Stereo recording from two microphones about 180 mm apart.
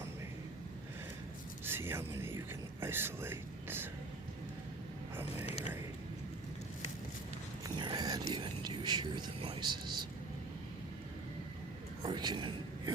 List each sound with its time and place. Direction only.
1.6 s speech: 10° right (ahead or behind)
7.6 s a sound: 25° right (ahead or behind)
12.0 s a man's voice: 25° right (ahead or behind)